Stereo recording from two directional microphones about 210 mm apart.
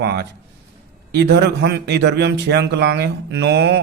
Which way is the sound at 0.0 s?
50° right (ahead or behind).